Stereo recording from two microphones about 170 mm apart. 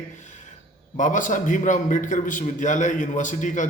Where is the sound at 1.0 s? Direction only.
50° left (ahead or behind).